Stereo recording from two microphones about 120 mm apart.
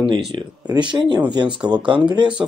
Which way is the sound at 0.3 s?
40° right (ahead or behind).